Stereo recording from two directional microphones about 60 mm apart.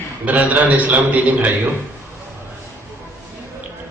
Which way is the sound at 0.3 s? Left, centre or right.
Right.